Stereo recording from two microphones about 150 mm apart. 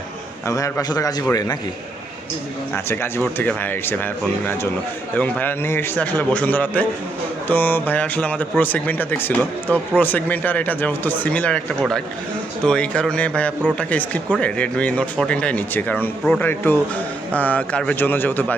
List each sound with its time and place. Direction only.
0.4 s a man's voice: 20° left (ahead or behind)
2.7 s speech: 15° left (ahead or behind)